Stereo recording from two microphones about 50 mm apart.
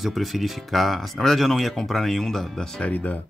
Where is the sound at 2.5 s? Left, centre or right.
Centre.